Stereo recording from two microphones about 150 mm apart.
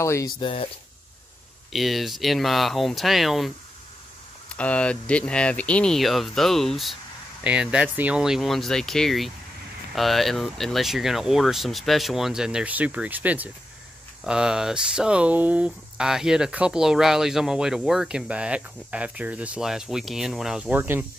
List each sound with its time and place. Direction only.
0.0 s speech: 20° left (ahead or behind)
0.4 s speech: 35° left (ahead or behind)
1.7 s speech: centre (ahead or behind)